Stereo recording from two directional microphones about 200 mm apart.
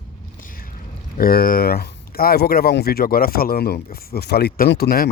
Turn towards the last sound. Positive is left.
turn(degrees=50)  # may be behind; listen again after turning